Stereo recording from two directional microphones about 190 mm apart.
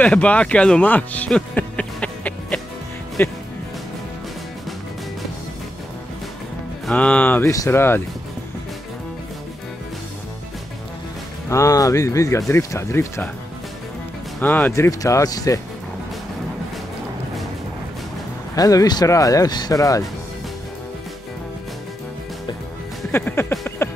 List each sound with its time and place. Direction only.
0.0 s speech: 5° left (ahead or behind)
6.9 s speech: 5° left (ahead or behind)
11.4 s speech: 15° left (ahead or behind)
14.4 s speech: 10° left (ahead or behind)
18.5 s speech: 20° left (ahead or behind)
23.1 s music: 10° left (ahead or behind)